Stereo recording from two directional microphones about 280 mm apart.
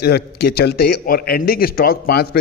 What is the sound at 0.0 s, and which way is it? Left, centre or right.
A man's voice, left.